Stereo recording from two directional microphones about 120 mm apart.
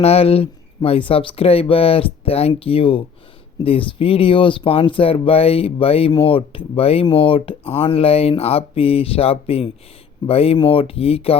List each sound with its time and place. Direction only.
0.0 s speech: 55° left (ahead or behind)